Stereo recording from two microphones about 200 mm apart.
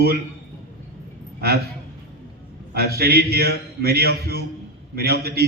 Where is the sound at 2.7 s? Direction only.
50° right (ahead or behind).